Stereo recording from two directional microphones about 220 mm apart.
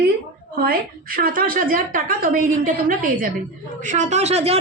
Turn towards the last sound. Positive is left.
turn(degrees=-30)  # may be behind; listen again after turning